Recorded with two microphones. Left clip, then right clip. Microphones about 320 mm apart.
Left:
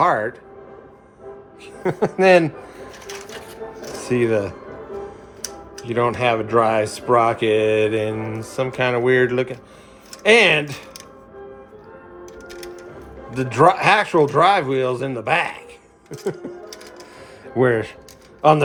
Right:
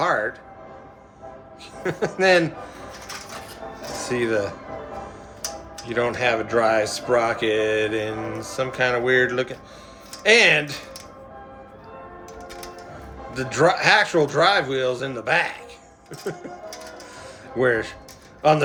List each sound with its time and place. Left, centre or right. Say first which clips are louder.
0.0 s speech: left 4 dB; centre
1.8 s speech: left 4 dB; centre
4.0 s speech: left 4 dB; centre
5.8 s speech: left 3 dB; centre
13.3 s speech: left 4 dB; centre
17.6 s speech: left 3 dB; centre